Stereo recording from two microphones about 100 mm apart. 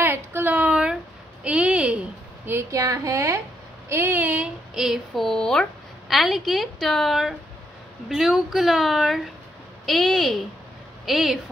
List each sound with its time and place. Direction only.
0.0 s a sound: 20° right (ahead or behind)
2.7 s speech: 35° right (ahead or behind); by 4.5 s 15° right (ahead or behind)
4.7 s a woman's voice: 5° right (ahead or behind)